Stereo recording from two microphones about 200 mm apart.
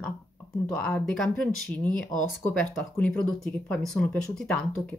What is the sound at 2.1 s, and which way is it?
Speech, 20° left (ahead or behind).